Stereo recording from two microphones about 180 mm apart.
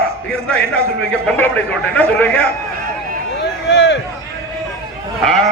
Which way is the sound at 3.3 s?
70° left (ahead or behind).